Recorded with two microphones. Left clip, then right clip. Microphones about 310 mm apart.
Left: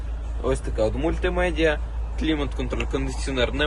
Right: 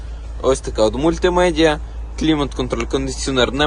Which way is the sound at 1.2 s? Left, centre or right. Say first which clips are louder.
Right 9 dB; right.